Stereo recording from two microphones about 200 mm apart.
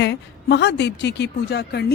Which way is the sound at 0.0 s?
55° left (ahead or behind).